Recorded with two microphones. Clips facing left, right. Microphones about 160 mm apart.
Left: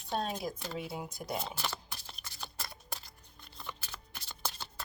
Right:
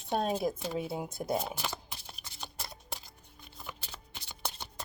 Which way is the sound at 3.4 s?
5° right (ahead or behind).